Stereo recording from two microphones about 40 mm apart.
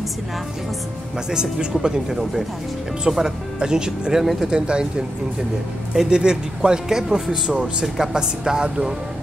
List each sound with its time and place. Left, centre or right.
1.3 s a man's voice: centre
3.1 s a man's voice: centre
4.2 s speech: centre
4.5 s a man's voice: right
6.0 s a man's voice: right